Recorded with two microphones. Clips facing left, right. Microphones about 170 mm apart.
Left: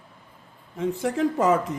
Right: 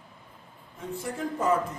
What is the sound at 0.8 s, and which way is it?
Speech, 90° left.